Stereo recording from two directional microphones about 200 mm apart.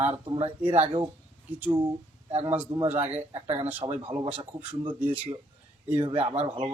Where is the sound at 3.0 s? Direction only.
30° right (ahead or behind).